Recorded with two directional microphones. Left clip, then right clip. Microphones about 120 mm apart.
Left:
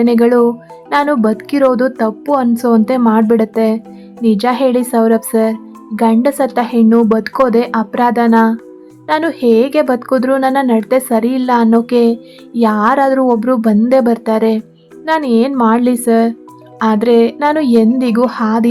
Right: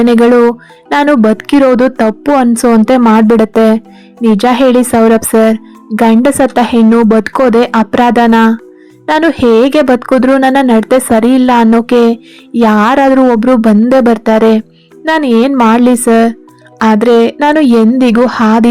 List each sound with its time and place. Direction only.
0.0 s a child's voice: 40° right (ahead or behind)